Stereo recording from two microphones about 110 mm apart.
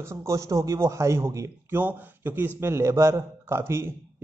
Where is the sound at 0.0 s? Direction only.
25° right (ahead or behind).